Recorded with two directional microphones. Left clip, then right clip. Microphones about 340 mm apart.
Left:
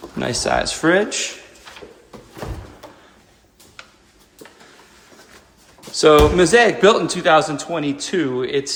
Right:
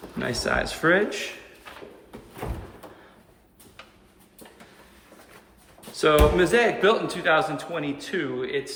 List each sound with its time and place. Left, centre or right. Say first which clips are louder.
0.2 s a man's voice: left 6 dB; centre
5.9 s a man's voice: left 7 dB; centre